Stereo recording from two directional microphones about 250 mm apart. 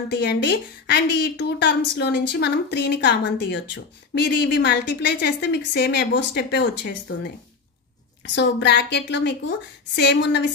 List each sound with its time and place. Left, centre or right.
0.1 s a woman's voice: left
8.4 s a woman's voice: left